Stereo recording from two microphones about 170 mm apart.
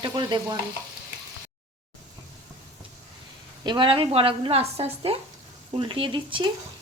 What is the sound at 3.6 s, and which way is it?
A woman's voice, 25° right (ahead or behind).